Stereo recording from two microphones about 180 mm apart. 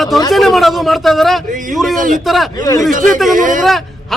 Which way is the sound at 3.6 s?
Centre (ahead or behind).